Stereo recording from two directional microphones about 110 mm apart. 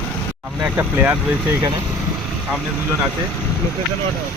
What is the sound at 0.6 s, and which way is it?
Speech, 15° right (ahead or behind).